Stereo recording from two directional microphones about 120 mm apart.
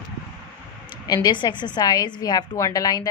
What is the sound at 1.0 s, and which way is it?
A woman's voice, 35° left (ahead or behind).